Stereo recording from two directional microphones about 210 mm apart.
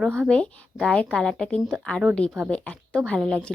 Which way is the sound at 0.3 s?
5° left (ahead or behind).